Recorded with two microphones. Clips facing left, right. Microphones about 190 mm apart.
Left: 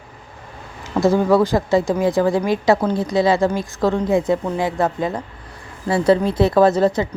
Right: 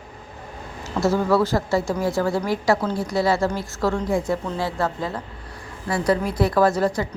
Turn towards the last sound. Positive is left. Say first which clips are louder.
# left 5 dB
turn(degrees=20)  # may be behind; listen again after turning